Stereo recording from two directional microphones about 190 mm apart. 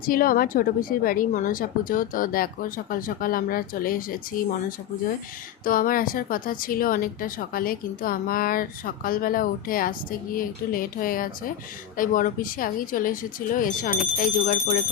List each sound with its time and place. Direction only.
0.0 s a woman's voice: 50° left (ahead or behind)
5.6 s a woman's voice: 45° left (ahead or behind)